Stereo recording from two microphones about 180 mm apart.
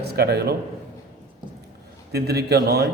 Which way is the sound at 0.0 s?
65° right (ahead or behind).